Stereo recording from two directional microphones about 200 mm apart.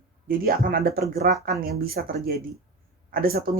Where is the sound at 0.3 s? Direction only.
45° right (ahead or behind).